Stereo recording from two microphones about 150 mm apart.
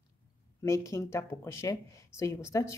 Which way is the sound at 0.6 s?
20° left (ahead or behind).